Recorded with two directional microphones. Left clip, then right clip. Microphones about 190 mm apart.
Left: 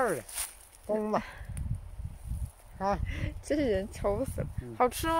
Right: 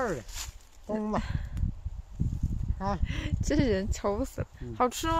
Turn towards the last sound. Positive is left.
turn(degrees=-10)  # may be behind; listen again after turning